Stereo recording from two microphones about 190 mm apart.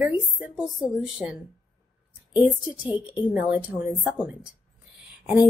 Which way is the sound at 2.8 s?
20° left (ahead or behind).